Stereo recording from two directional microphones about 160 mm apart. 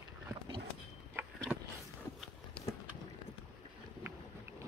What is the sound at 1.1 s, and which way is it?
Vehicle, 15° right (ahead or behind).